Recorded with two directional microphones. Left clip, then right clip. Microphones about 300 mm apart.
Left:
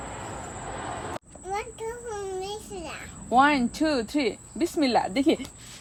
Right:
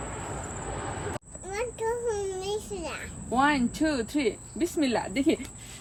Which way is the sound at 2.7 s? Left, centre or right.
Centre.